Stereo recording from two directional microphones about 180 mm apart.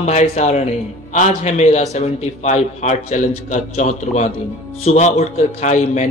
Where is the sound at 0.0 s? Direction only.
40° left (ahead or behind).